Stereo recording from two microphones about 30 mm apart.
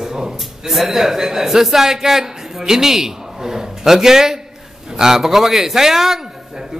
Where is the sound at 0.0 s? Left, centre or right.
Centre.